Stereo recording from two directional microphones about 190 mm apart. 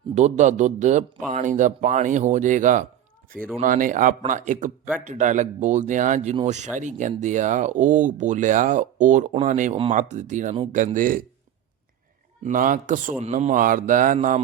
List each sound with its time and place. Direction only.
0.1 s speech: 35° right (ahead or behind)
3.3 s speech: 5° left (ahead or behind)
3.6 s a man's voice: 45° right (ahead or behind)
12.5 s a man's voice: 45° right (ahead or behind)